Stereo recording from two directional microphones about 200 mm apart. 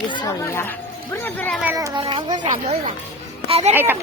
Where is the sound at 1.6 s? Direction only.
15° right (ahead or behind); by 3.8 s 30° right (ahead or behind).